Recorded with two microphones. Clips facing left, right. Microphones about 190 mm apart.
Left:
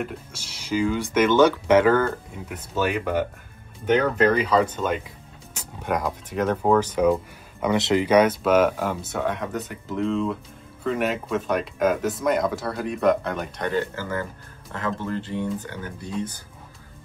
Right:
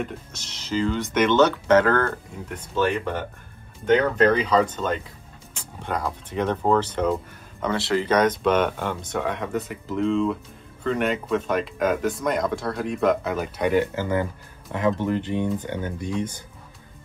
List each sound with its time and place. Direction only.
0.0 s speech: 10° left (ahead or behind); by 16.1 s 25° right (ahead or behind)